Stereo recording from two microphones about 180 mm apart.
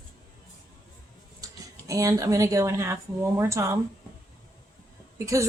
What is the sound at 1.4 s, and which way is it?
Speech, 20° right (ahead or behind).